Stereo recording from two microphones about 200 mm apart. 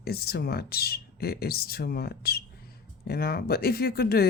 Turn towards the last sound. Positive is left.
turn(degrees=50)  # may be behind; listen again after turning